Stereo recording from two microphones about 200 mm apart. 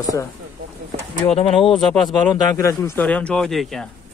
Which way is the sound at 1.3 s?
30° left (ahead or behind).